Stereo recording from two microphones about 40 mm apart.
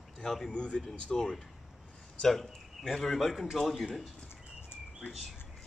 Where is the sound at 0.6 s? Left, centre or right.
Left.